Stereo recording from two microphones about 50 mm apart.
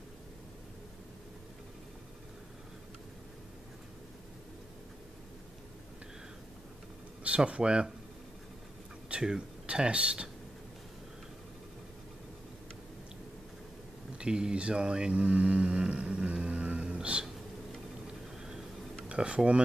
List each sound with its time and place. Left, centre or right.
7.2 s speech: right
9.1 s speech: centre
14.1 s speech: centre
19.0 s speech: right